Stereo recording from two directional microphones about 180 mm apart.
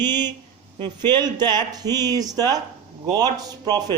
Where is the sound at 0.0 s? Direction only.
25° right (ahead or behind).